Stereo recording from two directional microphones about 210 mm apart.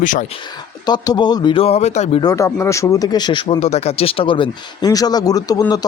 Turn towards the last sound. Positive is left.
turn(degrees=15)  # may be behind; listen again after turning